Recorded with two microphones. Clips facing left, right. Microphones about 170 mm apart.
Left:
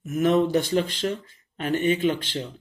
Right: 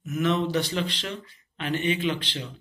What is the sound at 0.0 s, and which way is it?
Speech, 50° left (ahead or behind).